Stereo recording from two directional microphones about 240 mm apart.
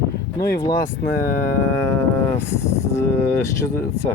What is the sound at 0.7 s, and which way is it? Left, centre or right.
Speech, left.